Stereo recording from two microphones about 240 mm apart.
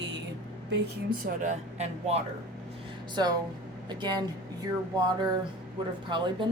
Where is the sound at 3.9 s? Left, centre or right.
Centre.